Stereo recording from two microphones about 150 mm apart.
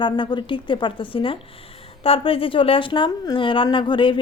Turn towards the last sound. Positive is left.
turn(degrees=35)  # may be behind; listen again after turning